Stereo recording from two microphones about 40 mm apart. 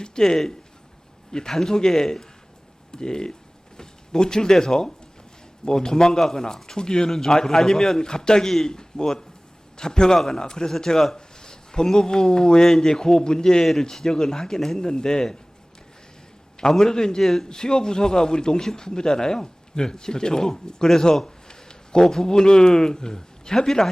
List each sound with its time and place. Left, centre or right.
0.0 s a man's voice: centre
16.6 s a man's voice: centre